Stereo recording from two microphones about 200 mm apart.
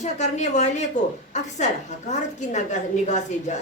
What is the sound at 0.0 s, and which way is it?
A woman's voice, 35° left (ahead or behind).